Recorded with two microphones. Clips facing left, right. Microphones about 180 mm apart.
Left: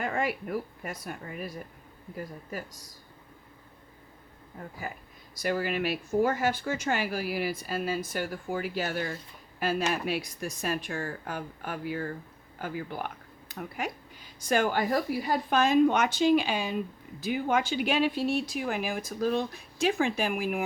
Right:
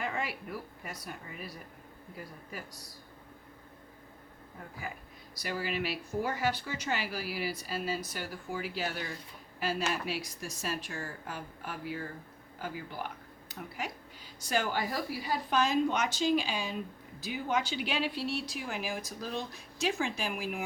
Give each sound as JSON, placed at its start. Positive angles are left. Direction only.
{"t": 0.0, "sound": "speech", "side_deg": 50}
{"t": 5.3, "sound": "speech", "side_deg": 50}